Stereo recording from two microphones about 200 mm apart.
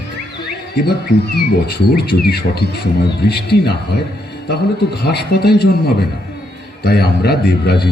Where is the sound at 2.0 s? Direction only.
55° left (ahead or behind).